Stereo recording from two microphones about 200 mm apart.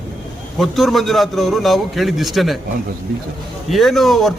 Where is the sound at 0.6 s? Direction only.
Centre (ahead or behind).